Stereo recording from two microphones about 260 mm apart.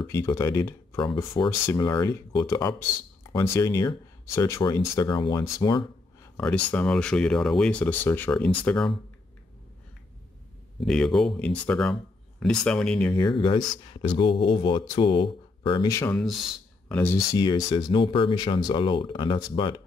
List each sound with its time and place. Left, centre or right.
0.0 s speech: centre
10.9 s speech: centre
13.1 s speech: centre